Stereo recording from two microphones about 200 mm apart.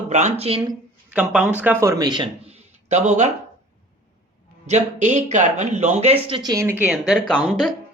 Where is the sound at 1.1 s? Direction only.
5° right (ahead or behind); by 3.3 s 35° right (ahead or behind).